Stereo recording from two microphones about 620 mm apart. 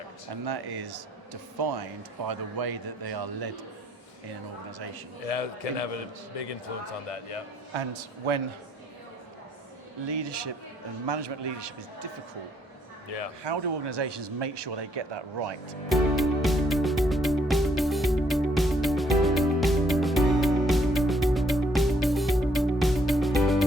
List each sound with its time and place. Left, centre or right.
0.4 s speech: right
5.2 s a man's voice: left
7.7 s a man's voice: right
10.1 s speech: right
13.4 s speech: right
15.9 s music: centre